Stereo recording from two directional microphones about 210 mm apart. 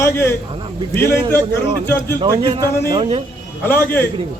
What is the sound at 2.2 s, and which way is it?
Speech, 20° right (ahead or behind).